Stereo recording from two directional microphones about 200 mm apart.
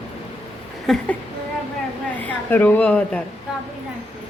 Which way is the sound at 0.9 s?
Centre (ahead or behind).